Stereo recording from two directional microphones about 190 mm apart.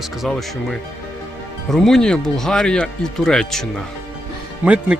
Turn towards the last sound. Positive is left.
turn(degrees=-5)  # may be behind; listen again after turning